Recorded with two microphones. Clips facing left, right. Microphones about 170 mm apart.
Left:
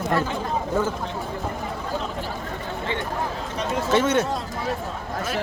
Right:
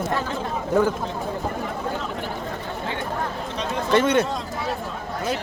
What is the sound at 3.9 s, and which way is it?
Speech, 5° left (ahead or behind).